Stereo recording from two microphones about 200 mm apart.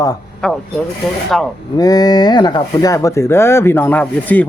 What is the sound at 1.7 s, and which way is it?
Speech, 20° left (ahead or behind).